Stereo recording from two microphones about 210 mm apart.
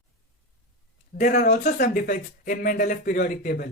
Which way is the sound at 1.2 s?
40° left (ahead or behind).